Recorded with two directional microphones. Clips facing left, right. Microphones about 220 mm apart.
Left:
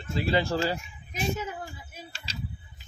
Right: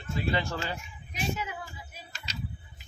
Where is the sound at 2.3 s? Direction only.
30° left (ahead or behind).